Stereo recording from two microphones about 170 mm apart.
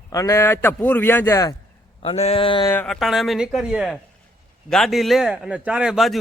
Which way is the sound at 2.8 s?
Centre (ahead or behind).